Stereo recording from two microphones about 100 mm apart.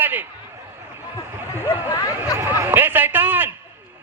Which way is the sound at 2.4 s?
25° right (ahead or behind).